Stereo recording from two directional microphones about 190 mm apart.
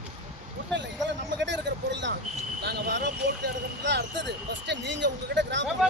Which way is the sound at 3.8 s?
70° right (ahead or behind).